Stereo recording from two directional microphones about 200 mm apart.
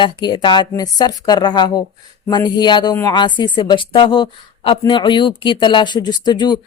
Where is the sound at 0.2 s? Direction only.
20° left (ahead or behind).